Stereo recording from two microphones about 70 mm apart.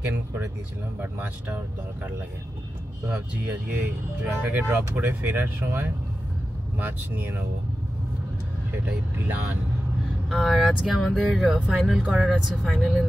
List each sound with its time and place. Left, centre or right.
1.1 s speech: right
3.1 s speech: right
10.3 s speech: centre
12.7 s speech: centre